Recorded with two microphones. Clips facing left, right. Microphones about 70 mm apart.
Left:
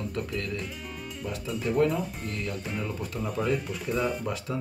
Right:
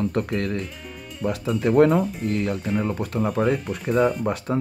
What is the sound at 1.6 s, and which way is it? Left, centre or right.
Speech, right.